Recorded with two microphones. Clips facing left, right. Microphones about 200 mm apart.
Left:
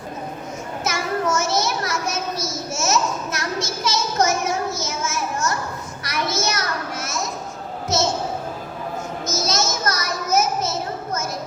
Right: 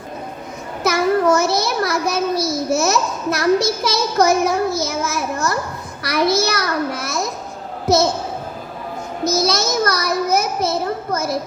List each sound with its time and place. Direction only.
0.9 s a child's voice: 60° right (ahead or behind)
9.2 s a child's voice: 35° right (ahead or behind)
9.5 s a child's voice: 60° right (ahead or behind)